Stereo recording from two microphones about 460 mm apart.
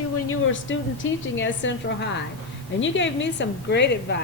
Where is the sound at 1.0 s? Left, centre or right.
Left.